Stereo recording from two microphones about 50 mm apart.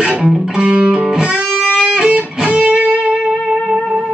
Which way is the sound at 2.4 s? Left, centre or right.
Right.